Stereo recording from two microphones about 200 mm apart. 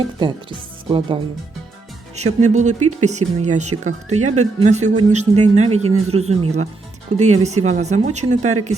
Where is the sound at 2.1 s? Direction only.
35° right (ahead or behind).